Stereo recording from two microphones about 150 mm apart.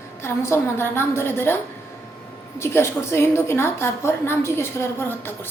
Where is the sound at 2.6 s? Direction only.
15° left (ahead or behind).